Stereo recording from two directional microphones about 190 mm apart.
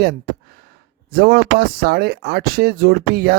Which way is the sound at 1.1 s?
55° right (ahead or behind).